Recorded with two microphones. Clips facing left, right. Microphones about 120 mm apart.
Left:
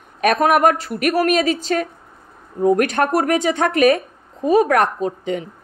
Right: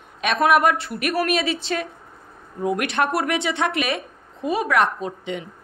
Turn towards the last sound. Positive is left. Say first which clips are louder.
# left 6 dB
turn(degrees=40)  # may be behind; listen again after turning